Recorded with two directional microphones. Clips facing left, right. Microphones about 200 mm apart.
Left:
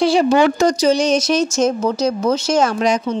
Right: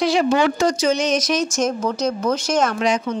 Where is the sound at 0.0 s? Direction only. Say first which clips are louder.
Left 4 dB; 30° left (ahead or behind).